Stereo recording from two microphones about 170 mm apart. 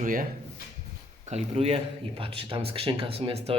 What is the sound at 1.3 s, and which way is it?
Speech, 35° right (ahead or behind).